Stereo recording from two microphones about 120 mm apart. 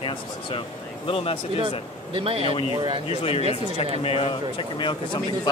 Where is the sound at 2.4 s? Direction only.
50° left (ahead or behind).